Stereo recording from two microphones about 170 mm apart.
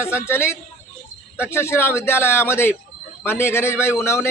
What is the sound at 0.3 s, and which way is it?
A man's voice, 15° left (ahead or behind).